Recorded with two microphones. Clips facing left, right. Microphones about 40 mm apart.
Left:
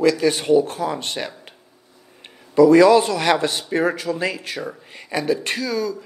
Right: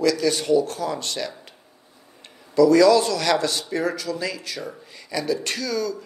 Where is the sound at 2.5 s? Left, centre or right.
Left.